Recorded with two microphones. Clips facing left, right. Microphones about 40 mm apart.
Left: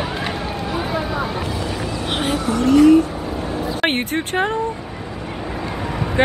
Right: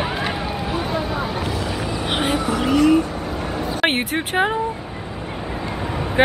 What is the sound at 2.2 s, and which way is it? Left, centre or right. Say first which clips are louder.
Vehicle: left 2 dB; centre.